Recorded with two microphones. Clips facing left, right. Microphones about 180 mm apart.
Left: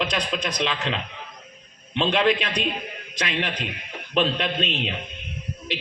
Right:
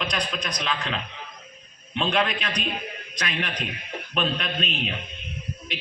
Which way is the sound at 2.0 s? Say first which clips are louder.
Left 4 dB; 25° left (ahead or behind).